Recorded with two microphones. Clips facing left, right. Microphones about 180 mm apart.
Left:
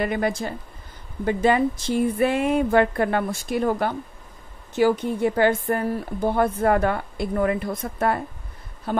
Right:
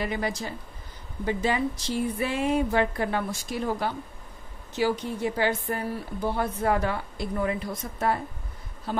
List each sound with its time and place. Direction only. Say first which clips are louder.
0.0 s a woman's voice: left 6 dB; 55° left (ahead or behind)